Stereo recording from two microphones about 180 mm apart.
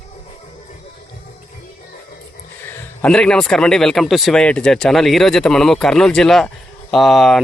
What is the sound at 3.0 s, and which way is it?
Speech, 5° left (ahead or behind).